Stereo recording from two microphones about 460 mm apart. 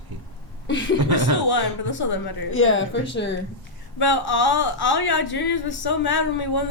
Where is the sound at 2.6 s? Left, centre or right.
Left.